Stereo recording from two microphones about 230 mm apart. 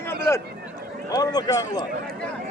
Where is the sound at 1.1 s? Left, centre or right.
Centre.